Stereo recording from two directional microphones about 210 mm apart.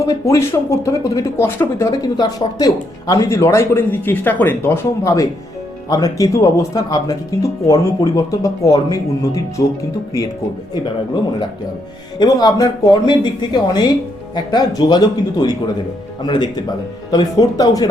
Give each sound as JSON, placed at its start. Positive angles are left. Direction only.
{"t": 0.0, "sound": "speech", "side_deg": 15}
{"t": 12.2, "sound": "speech", "side_deg": 20}